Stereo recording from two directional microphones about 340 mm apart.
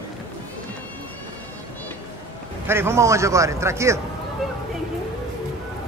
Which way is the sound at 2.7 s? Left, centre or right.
Centre.